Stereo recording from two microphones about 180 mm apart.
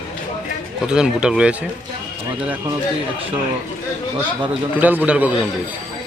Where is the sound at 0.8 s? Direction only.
5° right (ahead or behind).